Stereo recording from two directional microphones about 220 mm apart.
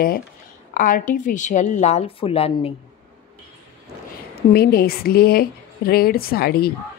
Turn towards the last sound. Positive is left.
turn(degrees=45)  # may be behind; listen again after turning